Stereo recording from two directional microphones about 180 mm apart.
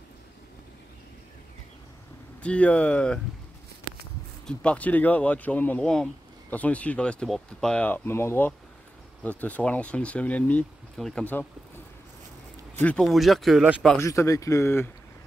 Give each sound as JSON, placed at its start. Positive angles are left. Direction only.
{"t": 2.4, "sound": "speech", "side_deg": 5}
{"t": 4.5, "sound": "speech", "side_deg": 5}
{"t": 12.8, "sound": "speech", "side_deg": 5}
{"t": 13.9, "sound": "speech", "side_deg": 15}